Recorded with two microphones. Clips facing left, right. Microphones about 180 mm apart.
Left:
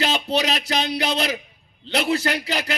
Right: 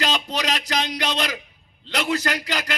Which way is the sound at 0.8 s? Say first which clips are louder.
Left 2 dB; 30° left (ahead or behind).